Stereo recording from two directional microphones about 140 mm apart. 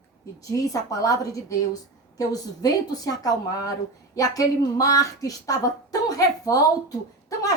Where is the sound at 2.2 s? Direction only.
25° left (ahead or behind).